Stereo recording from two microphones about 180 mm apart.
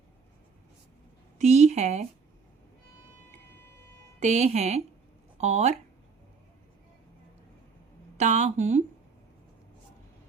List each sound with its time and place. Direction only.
1.4 s a woman's voice: 40° right (ahead or behind)
4.2 s speech: 40° right (ahead or behind)
8.2 s speech: 40° right (ahead or behind)